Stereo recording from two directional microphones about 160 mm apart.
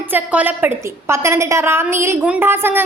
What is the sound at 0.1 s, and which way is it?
A woman's voice, 10° right (ahead or behind).